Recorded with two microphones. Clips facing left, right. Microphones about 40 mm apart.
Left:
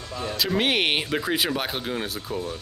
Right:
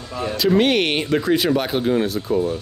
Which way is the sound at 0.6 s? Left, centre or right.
Centre.